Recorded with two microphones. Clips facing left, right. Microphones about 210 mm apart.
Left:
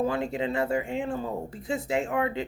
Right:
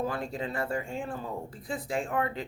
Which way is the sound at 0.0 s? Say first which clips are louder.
Left 5 dB; 25° left (ahead or behind).